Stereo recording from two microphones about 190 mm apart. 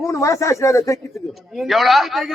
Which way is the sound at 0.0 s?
15° left (ahead or behind).